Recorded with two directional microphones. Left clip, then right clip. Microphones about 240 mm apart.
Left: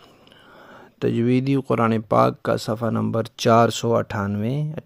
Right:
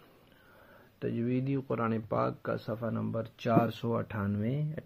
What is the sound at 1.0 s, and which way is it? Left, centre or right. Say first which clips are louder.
Speech: left 13 dB; left.